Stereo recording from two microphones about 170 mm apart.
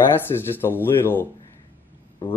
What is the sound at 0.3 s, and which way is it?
Speech, 15° left (ahead or behind).